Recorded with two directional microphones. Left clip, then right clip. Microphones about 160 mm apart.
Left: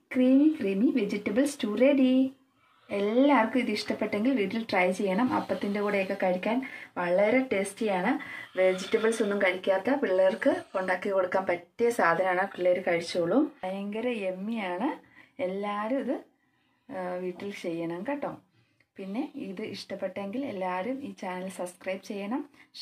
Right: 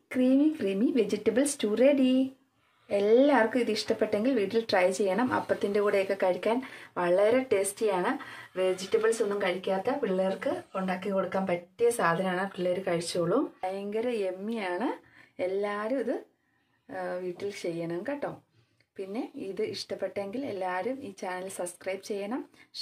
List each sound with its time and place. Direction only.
0.2 s a woman's voice: 25° right (ahead or behind)
8.9 s speech: 10° left (ahead or behind)
12.2 s speech: 5° left (ahead or behind)
13.7 s speech: 25° right (ahead or behind)